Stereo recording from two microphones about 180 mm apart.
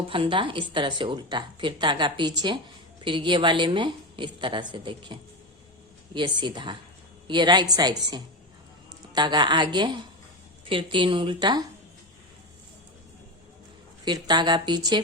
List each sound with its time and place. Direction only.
0.1 s speech: 30° right (ahead or behind)
6.1 s speech: 25° right (ahead or behind)
14.0 s speech: 25° right (ahead or behind)